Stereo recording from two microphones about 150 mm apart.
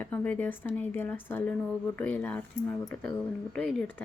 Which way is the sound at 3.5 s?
5° left (ahead or behind).